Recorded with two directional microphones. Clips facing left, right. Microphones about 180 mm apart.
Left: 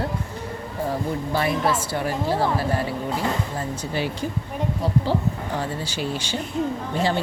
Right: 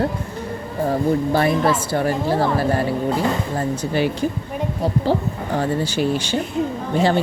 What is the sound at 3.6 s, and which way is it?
Speech, 60° right (ahead or behind).